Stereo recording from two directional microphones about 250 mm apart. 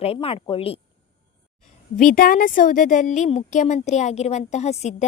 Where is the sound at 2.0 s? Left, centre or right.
Left.